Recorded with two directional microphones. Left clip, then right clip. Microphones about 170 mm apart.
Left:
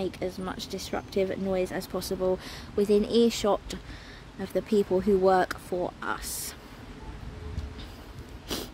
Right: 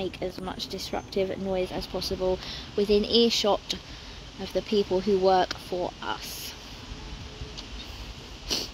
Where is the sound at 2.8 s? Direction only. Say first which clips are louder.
Right 1 dB; 15° left (ahead or behind).